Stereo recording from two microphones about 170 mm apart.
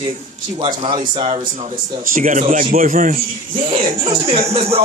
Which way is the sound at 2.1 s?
55° right (ahead or behind).